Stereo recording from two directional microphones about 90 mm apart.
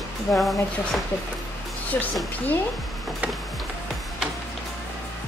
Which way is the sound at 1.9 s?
25° left (ahead or behind).